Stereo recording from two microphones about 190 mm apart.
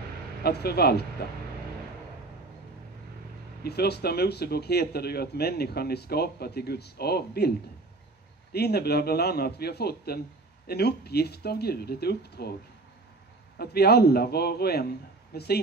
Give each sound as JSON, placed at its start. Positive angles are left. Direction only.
{"t": 0.4, "sound": "speech", "side_deg": 55}
{"t": 3.6, "sound": "speech", "side_deg": 60}
{"t": 8.5, "sound": "speech", "side_deg": 55}
{"t": 13.6, "sound": "speech", "side_deg": 55}